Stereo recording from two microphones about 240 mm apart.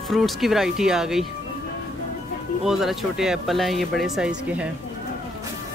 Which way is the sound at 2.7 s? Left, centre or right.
Centre.